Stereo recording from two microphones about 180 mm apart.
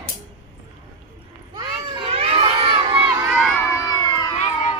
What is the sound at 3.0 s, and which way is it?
Crowd, 5° right (ahead or behind).